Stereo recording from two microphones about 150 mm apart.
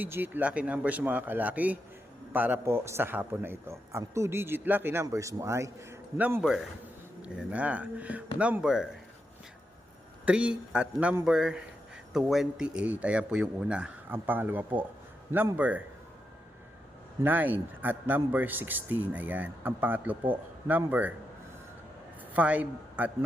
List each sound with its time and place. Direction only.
0.0 s a man's voice: 15° right (ahead or behind)
10.2 s a man's voice: 5° right (ahead or behind)
17.2 s a man's voice: 10° right (ahead or behind)
22.3 s a man's voice: 10° right (ahead or behind)